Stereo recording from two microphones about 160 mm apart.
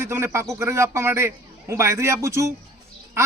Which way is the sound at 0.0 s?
15° right (ahead or behind).